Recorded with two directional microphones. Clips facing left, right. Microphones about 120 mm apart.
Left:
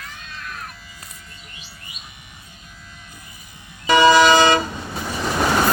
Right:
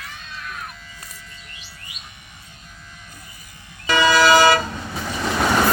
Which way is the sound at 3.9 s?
20° left (ahead or behind).